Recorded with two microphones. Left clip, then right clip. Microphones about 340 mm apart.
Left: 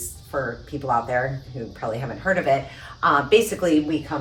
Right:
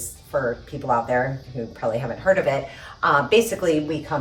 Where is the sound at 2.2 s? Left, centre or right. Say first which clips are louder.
Right 1 dB; centre.